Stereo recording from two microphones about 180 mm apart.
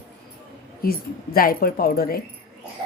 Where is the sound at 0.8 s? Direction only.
55° left (ahead or behind).